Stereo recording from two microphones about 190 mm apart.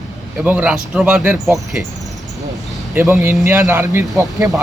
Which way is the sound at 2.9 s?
10° right (ahead or behind).